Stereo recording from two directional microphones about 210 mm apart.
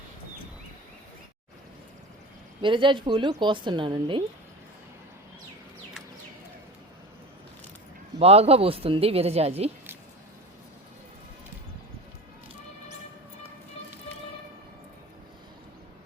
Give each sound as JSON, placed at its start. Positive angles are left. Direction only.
{"t": 2.6, "sound": "a woman's voice", "side_deg": -25}
{"t": 8.2, "sound": "a woman's voice", "side_deg": -30}